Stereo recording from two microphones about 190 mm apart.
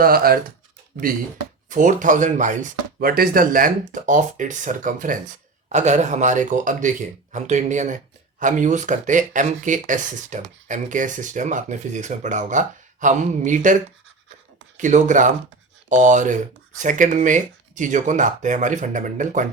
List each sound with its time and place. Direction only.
0.0 s speech: 50° right (ahead or behind)
14.8 s speech: 40° right (ahead or behind)